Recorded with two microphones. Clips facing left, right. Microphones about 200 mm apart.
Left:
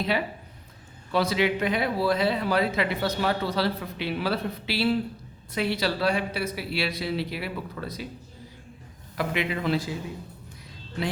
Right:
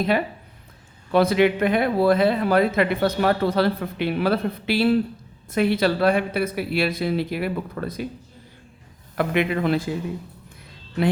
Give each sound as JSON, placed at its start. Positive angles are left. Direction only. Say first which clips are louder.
{"t": 1.1, "sound": "speech", "louder": "right 6 dB", "side_deg": -55}
{"t": 9.1, "sound": "speech", "louder": "right 6 dB", "side_deg": -55}